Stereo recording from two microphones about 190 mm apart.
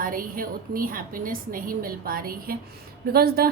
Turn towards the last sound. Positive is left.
turn(degrees=-55)  # may be behind; listen again after turning